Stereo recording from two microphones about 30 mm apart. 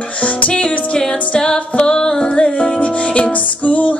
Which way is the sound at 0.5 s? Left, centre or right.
Left.